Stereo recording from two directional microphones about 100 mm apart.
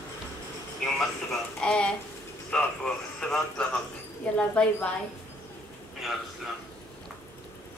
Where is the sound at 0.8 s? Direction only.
5° left (ahead or behind).